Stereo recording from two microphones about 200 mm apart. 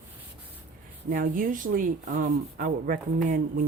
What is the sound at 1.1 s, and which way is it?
Speech, 40° right (ahead or behind).